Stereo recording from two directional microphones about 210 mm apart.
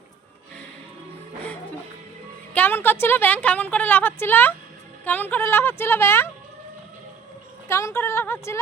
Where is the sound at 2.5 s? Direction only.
10° left (ahead or behind).